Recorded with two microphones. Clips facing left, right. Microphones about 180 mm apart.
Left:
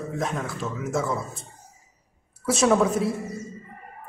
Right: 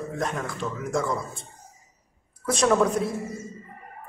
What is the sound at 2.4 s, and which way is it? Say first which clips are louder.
Speech: left 1 dB; 5° left (ahead or behind).